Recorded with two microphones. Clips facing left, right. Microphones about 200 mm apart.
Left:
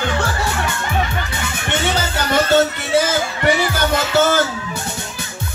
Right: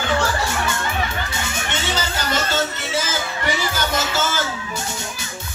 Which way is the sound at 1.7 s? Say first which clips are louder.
Left 7 dB; 60° left (ahead or behind).